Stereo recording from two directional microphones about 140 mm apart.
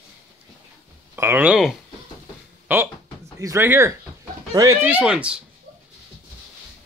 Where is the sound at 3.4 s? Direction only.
20° right (ahead or behind).